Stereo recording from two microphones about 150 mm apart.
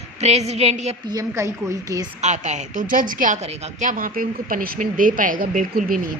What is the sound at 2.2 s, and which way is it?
A woman's voice, 50° right (ahead or behind).